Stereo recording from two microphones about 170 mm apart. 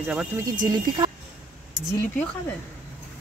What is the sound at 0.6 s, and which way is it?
Speech, 25° right (ahead or behind).